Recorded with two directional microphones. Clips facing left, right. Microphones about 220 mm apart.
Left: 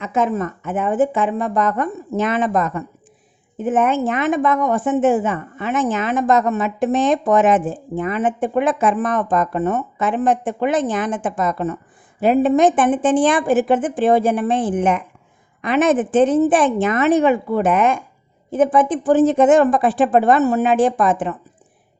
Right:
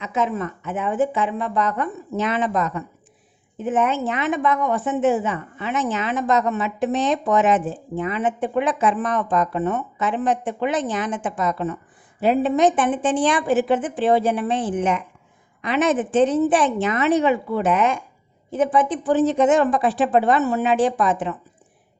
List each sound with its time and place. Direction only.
0.0 s a woman's voice: 50° left (ahead or behind)